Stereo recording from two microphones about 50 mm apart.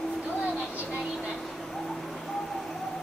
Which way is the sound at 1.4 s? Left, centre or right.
Centre.